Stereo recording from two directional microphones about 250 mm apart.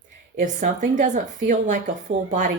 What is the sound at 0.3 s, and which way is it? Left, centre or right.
Speech, right.